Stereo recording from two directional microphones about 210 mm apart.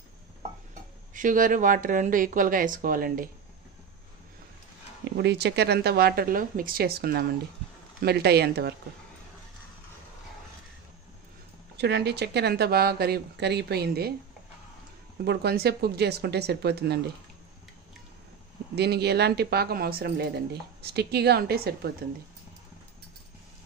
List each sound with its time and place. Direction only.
1.1 s speech: 40° right (ahead or behind)
5.0 s speech: 55° right (ahead or behind)
11.7 s speech: 50° right (ahead or behind)
15.2 s speech: 50° right (ahead or behind)
18.8 s speech: 50° right (ahead or behind)